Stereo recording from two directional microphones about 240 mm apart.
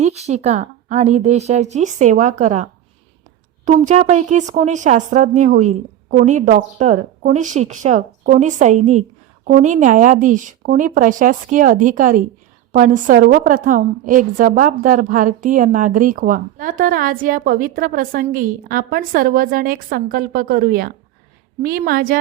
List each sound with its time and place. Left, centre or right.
0.0 s speech: right
3.7 s a woman's voice: right